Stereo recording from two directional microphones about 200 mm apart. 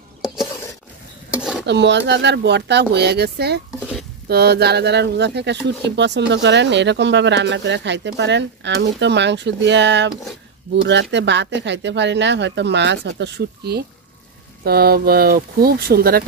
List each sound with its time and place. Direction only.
1.7 s speech: 60° right (ahead or behind)